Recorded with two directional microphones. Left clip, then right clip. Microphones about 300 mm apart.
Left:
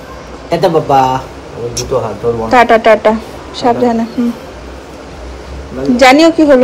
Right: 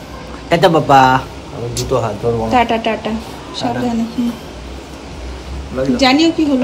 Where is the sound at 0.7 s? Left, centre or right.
Right.